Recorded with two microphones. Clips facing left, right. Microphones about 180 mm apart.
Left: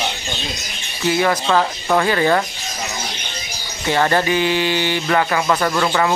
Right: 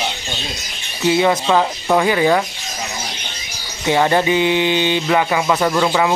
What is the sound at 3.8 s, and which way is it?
Speech, 15° right (ahead or behind).